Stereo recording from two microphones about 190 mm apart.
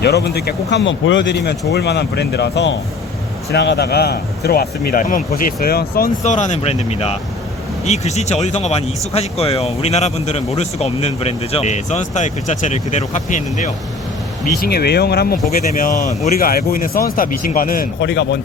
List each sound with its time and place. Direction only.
0.0 s speech: 60° left (ahead or behind)
6.2 s speech: 40° left (ahead or behind)
14.5 s speech: 55° left (ahead or behind)
15.7 s speech: 45° left (ahead or behind); by 18.3 s 65° left (ahead or behind)